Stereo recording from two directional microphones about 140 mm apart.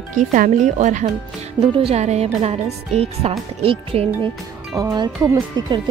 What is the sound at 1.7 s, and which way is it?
Speech, 45° right (ahead or behind).